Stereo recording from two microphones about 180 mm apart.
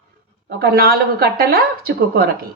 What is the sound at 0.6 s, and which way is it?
Speech, 55° right (ahead or behind).